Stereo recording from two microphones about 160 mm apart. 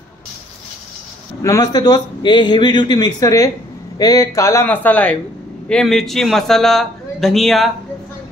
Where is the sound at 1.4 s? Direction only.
25° left (ahead or behind).